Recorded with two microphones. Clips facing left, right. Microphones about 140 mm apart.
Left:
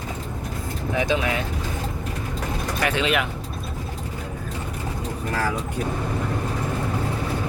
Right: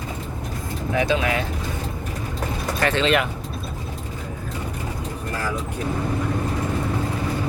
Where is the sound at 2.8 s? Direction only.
10° left (ahead or behind).